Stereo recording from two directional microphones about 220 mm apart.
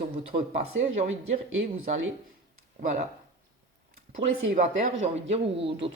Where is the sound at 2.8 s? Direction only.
35° right (ahead or behind).